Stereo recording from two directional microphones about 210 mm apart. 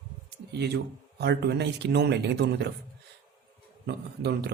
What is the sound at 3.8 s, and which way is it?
Speech, 50° right (ahead or behind).